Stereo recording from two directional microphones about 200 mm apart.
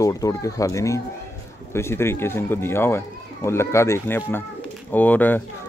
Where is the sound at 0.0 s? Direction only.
15° left (ahead or behind).